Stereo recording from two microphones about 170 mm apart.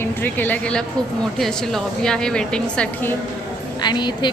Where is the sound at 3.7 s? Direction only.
25° left (ahead or behind).